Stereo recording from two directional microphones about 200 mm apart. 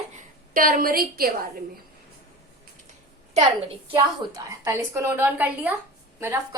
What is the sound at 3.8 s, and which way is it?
A woman's voice, 15° right (ahead or behind).